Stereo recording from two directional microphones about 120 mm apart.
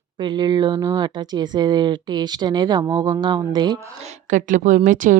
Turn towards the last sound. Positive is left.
turn(degrees=-90)